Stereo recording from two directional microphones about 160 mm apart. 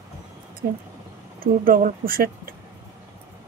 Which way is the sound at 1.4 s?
60° right (ahead or behind).